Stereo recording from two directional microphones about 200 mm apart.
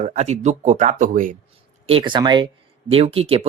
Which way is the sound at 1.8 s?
25° right (ahead or behind).